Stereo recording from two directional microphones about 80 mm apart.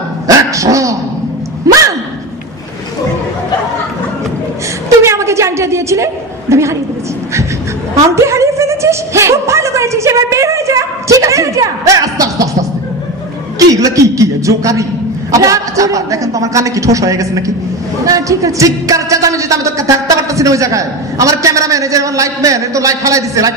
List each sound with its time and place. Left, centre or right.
0.3 s dog: right
1.7 s gasp: right
4.8 s a sound: right
6.5 s dog: right
7.9 s a sound: right
13.6 s speech: right